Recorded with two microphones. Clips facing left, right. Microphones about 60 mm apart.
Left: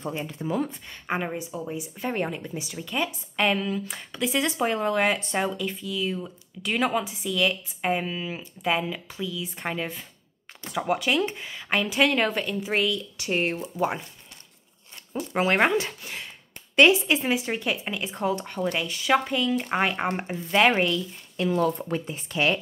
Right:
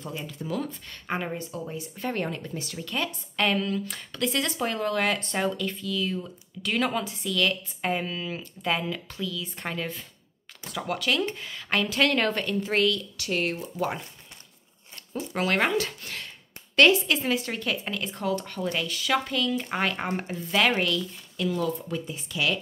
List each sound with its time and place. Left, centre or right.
0.0 s speech: left
15.1 s speech: left
21.5 s speech: left